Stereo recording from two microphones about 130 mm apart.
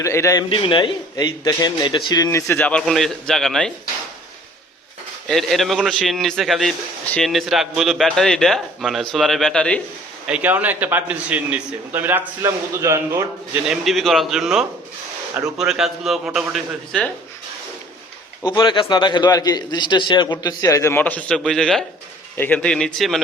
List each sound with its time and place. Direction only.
0.0 s speech: 20° left (ahead or behind)
0.5 s speech: 40° left (ahead or behind); by 3.7 s centre (ahead or behind)
5.3 s a man's voice: centre (ahead or behind)
10.2 s a man's voice: 10° right (ahead or behind)
13.7 s a man's voice: centre (ahead or behind)
18.4 s a man's voice: 35° left (ahead or behind); by 23.2 s centre (ahead or behind)